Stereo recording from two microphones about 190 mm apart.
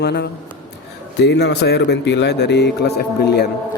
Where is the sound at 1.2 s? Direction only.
60° left (ahead or behind).